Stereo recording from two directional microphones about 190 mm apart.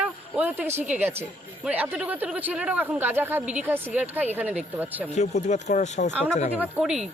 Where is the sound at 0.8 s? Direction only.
10° right (ahead or behind).